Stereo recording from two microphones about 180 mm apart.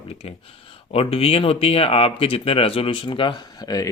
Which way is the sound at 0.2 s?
30° left (ahead or behind).